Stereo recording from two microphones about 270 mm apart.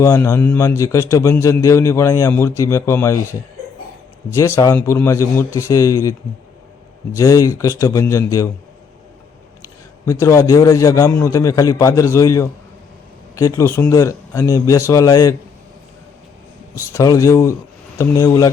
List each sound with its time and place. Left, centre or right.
0.0 s a man's voice: centre
4.3 s a man's voice: centre
7.2 s a man's voice: centre
10.1 s a man's voice: centre
16.8 s a man's voice: centre